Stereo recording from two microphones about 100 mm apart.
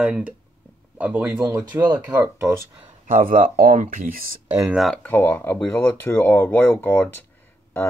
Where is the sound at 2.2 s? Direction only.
25° right (ahead or behind).